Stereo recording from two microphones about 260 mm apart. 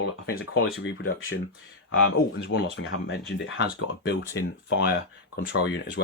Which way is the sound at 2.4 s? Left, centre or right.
Left.